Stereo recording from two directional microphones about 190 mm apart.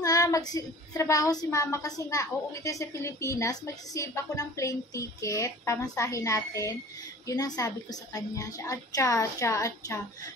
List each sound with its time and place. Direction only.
0.0 s a woman's voice: 20° left (ahead or behind)